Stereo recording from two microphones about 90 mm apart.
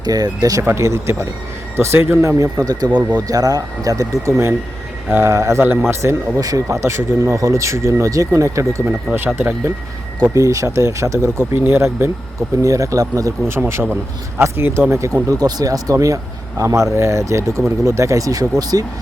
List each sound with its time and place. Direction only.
0.0 s speech: 45° right (ahead or behind)
0.6 s speech: 30° right (ahead or behind)
2.4 s speech: 45° right (ahead or behind)
9.1 s speech: 25° right (ahead or behind)
10.3 s speech: 40° right (ahead or behind)
13.5 s speech: 30° right (ahead or behind)